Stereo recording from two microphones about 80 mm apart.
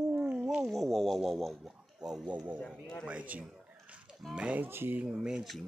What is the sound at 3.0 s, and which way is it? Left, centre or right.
Speech, centre.